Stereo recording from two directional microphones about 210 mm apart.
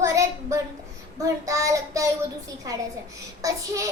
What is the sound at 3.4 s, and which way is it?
Speech, 15° right (ahead or behind).